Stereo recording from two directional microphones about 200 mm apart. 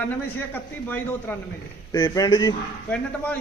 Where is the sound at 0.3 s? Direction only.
10° left (ahead or behind).